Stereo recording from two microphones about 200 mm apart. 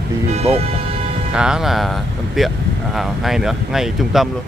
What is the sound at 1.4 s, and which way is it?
Speech, 5° right (ahead or behind).